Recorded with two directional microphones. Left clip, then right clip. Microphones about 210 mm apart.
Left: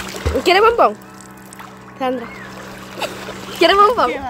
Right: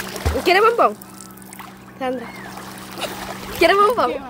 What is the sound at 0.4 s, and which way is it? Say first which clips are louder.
Speech: left 3 dB; 10° left (ahead or behind).